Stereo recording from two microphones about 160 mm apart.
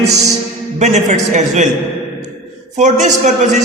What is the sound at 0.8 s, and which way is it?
Speech, 45° right (ahead or behind).